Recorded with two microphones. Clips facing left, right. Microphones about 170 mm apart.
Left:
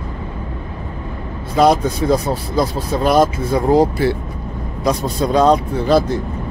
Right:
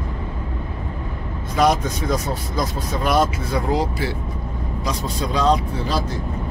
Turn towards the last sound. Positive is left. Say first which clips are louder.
# left 7 dB
turn(degrees=55)  # may be behind; listen again after turning